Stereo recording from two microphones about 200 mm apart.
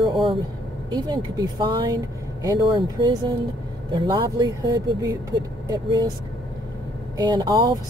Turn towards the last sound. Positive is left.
turn(degrees=-20)  # may be behind; listen again after turning